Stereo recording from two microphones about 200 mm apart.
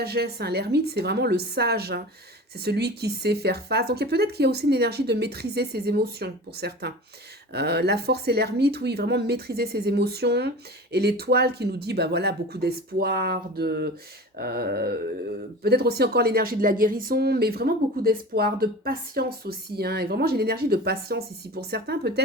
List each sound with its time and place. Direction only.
0.0 s a woman's voice: 50° right (ahead or behind)